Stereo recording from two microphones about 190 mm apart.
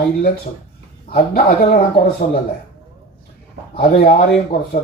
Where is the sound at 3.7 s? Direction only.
50° left (ahead or behind).